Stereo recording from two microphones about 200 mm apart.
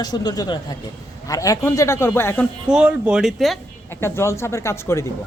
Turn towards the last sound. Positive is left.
turn(degrees=15)  # may be behind; listen again after turning